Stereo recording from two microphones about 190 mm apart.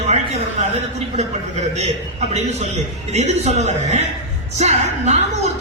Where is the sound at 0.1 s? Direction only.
35° right (ahead or behind).